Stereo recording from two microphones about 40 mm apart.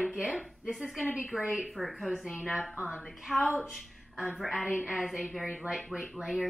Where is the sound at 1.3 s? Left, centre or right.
Left.